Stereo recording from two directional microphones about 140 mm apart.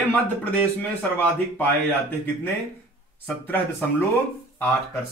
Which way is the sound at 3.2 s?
15° left (ahead or behind).